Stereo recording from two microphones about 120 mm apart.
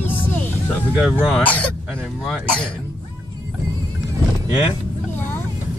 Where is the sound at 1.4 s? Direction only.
10° left (ahead or behind).